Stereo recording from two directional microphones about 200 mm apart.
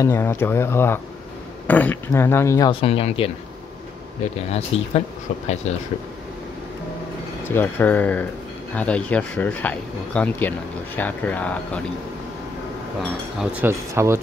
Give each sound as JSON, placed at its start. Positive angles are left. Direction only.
{"t": 0.0, "sound": "speech", "side_deg": 15}
{"t": 2.7, "sound": "speech", "side_deg": 30}
{"t": 7.5, "sound": "speech", "side_deg": 10}
{"t": 13.4, "sound": "speech", "side_deg": -5}